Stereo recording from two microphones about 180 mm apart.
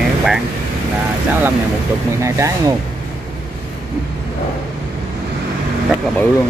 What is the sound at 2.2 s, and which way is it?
Speech, 15° right (ahead or behind).